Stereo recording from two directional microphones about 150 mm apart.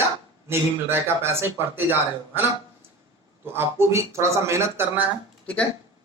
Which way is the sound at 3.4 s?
15° right (ahead or behind).